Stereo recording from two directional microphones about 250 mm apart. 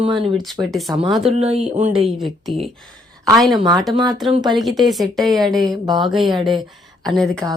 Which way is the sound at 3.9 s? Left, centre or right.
Centre.